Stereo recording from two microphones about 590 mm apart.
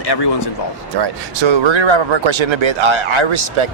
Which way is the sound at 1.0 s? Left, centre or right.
Right.